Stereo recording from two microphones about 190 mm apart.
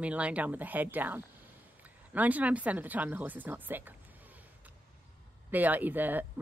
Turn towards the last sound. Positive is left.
turn(degrees=-10)  # may be behind; listen again after turning